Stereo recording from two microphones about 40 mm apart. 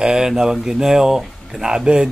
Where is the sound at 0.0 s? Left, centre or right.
Centre.